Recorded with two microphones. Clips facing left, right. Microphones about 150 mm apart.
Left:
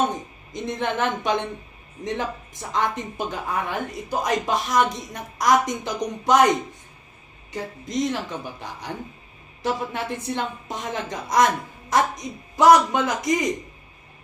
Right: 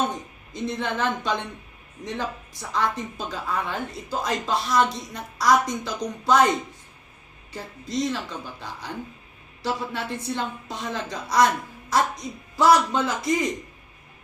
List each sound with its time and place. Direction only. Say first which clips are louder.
0.5 s a woman's voice: left 2 dB; 20° left (ahead or behind)
7.9 s a woman's voice: left 1 dB; 15° left (ahead or behind)